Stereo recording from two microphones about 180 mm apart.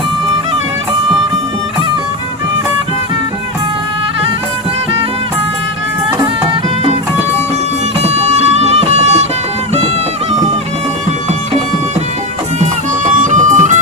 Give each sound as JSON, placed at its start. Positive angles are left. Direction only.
{"t": 8.0, "sound": "music", "side_deg": -35}
{"t": 13.1, "sound": "music", "side_deg": -45}